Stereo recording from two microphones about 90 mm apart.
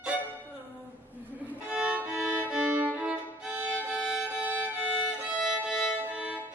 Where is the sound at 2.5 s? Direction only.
10° right (ahead or behind).